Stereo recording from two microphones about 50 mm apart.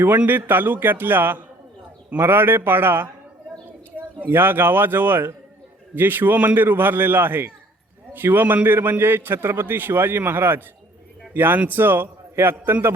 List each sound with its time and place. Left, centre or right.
0.3 s a man's voice: right